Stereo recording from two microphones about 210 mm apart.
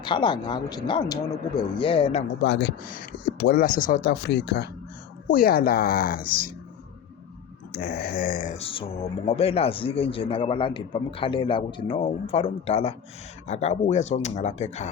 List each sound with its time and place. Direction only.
0.0 s speech: 20° left (ahead or behind)
2.2 s speech: 55° left (ahead or behind)
7.7 s speech: 45° left (ahead or behind)